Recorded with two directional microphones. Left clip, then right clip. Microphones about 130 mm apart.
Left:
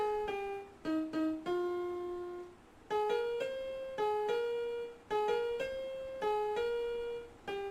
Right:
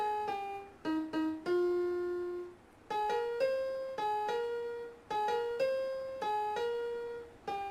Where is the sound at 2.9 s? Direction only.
40° right (ahead or behind).